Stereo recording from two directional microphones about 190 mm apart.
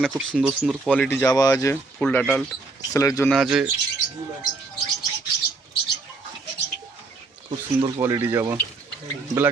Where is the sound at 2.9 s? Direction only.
15° left (ahead or behind).